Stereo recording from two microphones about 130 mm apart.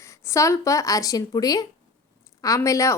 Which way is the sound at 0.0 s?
20° left (ahead or behind).